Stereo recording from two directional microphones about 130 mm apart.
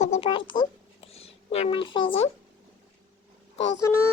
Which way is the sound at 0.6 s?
50° left (ahead or behind).